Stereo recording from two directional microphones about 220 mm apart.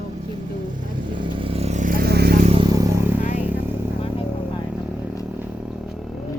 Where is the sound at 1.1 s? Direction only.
20° right (ahead or behind); by 2.3 s 45° right (ahead or behind).